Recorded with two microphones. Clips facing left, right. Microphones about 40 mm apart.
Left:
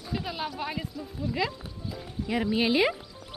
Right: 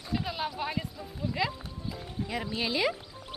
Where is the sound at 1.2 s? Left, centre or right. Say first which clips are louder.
Left 1 dB; centre.